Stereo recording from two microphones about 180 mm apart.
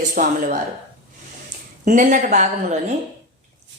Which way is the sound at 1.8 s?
45° right (ahead or behind).